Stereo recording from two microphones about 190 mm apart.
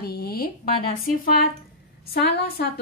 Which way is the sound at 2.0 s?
55° left (ahead or behind).